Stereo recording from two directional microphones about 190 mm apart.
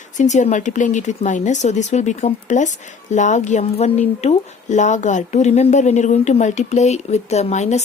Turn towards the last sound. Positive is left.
turn(degrees=35)  # may be behind; listen again after turning